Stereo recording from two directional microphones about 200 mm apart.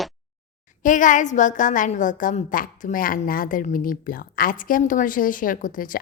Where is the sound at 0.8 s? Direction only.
40° left (ahead or behind).